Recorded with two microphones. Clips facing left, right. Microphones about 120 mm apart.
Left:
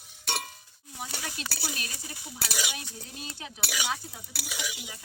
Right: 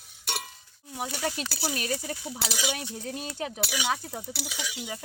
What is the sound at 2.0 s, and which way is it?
Speech, 60° right (ahead or behind).